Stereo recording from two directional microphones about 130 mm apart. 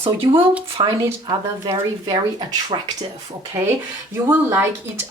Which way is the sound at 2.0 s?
35° right (ahead or behind).